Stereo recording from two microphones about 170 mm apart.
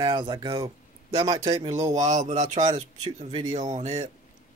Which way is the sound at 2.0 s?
45° right (ahead or behind).